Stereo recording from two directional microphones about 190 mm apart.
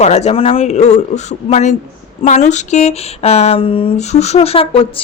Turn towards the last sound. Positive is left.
turn(degrees=30)  # may be behind; listen again after turning